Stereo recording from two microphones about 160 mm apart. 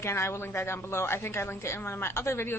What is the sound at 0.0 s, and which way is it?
A woman's voice, 15° left (ahead or behind).